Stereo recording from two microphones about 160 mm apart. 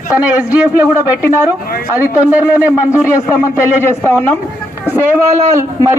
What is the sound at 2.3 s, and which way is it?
Speech, 10° right (ahead or behind).